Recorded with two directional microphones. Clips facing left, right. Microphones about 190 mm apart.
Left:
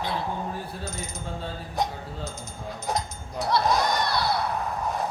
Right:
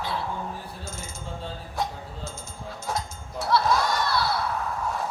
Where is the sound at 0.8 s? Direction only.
15° left (ahead or behind).